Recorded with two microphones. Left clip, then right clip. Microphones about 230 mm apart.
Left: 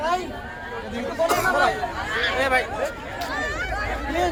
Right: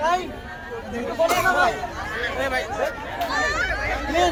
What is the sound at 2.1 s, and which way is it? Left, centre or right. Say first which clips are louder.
Speech: left 4 dB; centre.